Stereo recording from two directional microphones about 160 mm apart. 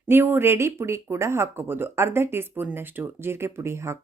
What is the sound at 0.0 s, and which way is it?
Speech, 15° right (ahead or behind).